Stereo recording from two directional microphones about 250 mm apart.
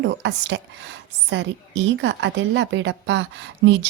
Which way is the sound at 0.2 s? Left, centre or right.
Right.